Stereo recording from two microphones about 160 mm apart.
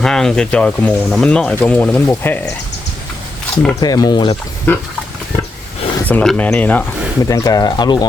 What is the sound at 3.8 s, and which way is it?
Speech, 25° left (ahead or behind).